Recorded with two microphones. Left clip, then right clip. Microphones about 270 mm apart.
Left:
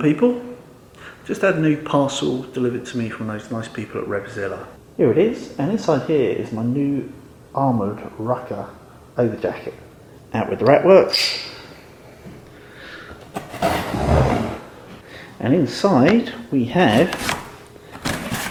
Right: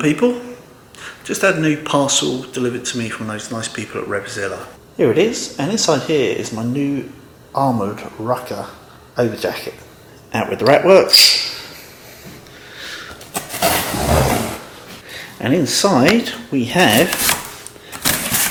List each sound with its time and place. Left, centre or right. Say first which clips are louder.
0.0 s speech: right 1 dB; centre
7.5 s speech: right 3 dB; centre
9.1 s speech: right 2 dB; centre
12.9 s a sound: right 4 dB; centre
15.4 s speech: right 3 dB; centre
17.9 s a sound: right 6 dB; centre